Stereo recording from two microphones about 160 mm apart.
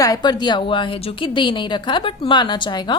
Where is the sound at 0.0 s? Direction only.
25° left (ahead or behind).